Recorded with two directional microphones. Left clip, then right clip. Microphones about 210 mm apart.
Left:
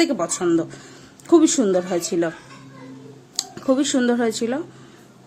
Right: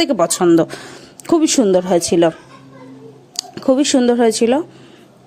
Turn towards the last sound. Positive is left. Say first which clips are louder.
# right 8 dB
turn(degrees=-30)  # may be behind; listen again after turning